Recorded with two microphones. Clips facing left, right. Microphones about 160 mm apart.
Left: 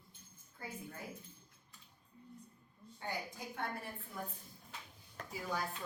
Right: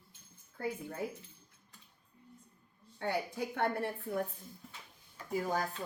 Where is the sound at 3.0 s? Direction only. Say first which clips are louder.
Right 8 dB; 65° right (ahead or behind).